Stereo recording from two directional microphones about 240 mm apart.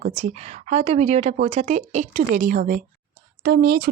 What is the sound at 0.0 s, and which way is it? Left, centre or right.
A woman's voice, right.